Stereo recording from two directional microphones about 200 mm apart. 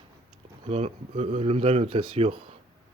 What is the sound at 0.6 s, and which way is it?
Speech, 30° right (ahead or behind).